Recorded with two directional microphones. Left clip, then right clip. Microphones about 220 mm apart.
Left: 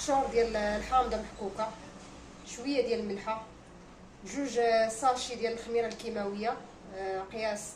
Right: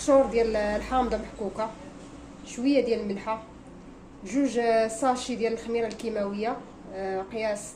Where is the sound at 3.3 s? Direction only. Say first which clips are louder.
Right 4 dB; 40° right (ahead or behind).